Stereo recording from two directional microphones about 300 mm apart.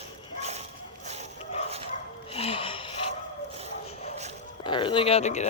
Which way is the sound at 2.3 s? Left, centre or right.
Centre.